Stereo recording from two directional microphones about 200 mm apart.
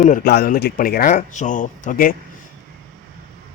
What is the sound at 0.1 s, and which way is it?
Speech, 50° left (ahead or behind).